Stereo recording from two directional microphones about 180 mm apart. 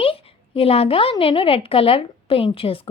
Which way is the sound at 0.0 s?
30° left (ahead or behind).